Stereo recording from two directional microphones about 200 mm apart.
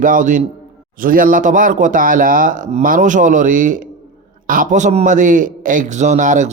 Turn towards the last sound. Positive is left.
turn(degrees=-40)  # may be behind; listen again after turning